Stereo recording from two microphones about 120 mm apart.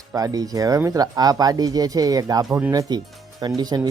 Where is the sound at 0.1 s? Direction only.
30° right (ahead or behind).